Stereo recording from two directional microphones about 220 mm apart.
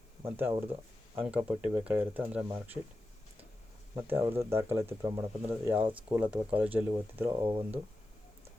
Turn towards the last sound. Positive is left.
turn(degrees=-20)  # may be behind; listen again after turning